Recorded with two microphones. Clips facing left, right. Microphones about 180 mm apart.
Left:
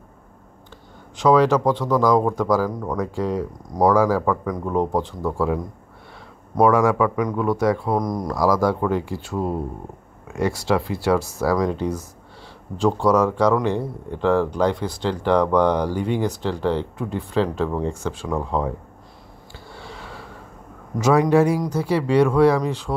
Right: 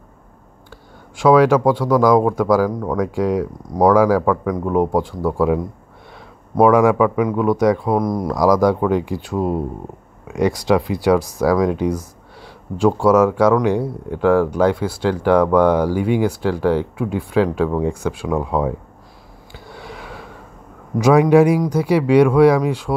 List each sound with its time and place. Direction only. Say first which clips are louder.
1.1 s speech: right 4 dB; 10° right (ahead or behind)
8.0 s speech: right 4 dB; 5° right (ahead or behind)
8.4 s speech: right 4 dB; 15° right (ahead or behind)
19.7 s a sound: right 4 dB; 15° right (ahead or behind)
21.0 s speech: right 4 dB; 15° right (ahead or behind)